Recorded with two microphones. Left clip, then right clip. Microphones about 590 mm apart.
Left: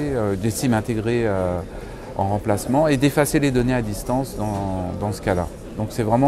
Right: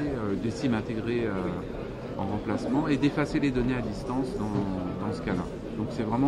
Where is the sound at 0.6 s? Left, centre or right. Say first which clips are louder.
Left 7 dB; left.